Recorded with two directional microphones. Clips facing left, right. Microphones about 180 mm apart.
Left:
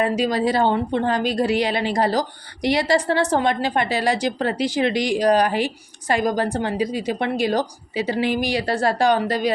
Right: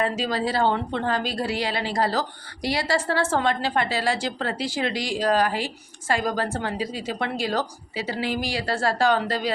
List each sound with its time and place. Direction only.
0.0 s a woman's voice: 15° left (ahead or behind)